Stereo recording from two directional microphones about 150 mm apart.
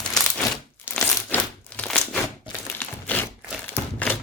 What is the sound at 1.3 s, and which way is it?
Crumpling, 10° left (ahead or behind).